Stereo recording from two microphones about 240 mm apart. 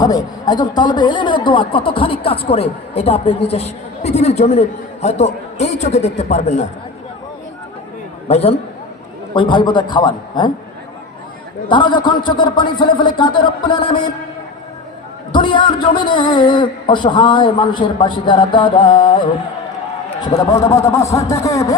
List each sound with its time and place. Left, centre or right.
0.0 s speech: centre
8.3 s speech: left
11.7 s speech: centre
15.3 s a man's voice: centre